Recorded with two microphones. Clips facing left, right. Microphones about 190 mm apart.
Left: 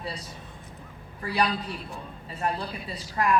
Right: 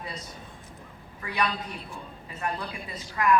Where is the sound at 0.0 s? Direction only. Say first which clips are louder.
Left 2 dB; 35° left (ahead or behind).